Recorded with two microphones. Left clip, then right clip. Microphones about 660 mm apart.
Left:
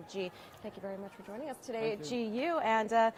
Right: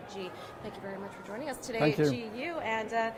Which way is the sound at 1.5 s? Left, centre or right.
Left.